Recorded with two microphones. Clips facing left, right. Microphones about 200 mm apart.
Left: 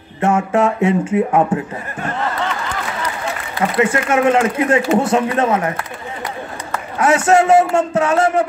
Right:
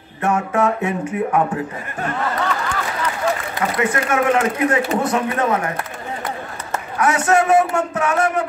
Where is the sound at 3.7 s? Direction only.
25° left (ahead or behind).